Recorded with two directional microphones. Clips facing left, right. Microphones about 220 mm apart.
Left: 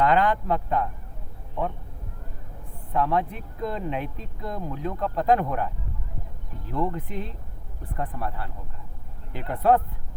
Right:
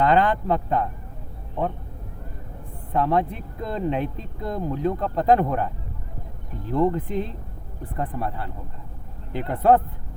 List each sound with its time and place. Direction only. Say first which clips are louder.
0.0 s speech: right 2 dB; 25° right (ahead or behind)
2.9 s speech: right 3 dB; 30° right (ahead or behind)
6.7 s speech: right 6 dB; 25° right (ahead or behind)